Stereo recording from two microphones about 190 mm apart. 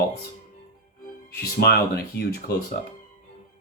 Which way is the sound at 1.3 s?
55° left (ahead or behind).